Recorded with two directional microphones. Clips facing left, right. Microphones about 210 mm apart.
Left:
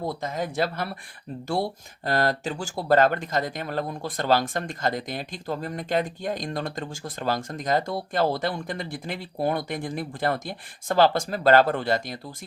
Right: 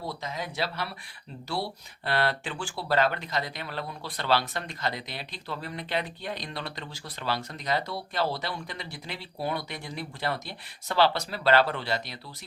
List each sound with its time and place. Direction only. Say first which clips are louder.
0.0 s speech: left 6 dB; 50° left (ahead or behind)